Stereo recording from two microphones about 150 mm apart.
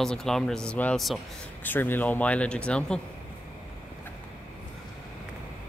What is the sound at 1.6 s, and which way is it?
Speech, 15° left (ahead or behind).